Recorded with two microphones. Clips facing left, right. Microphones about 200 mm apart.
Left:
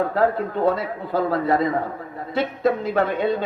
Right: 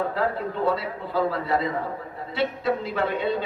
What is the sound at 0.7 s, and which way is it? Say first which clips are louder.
A man's voice: left 3 dB; 45° left (ahead or behind).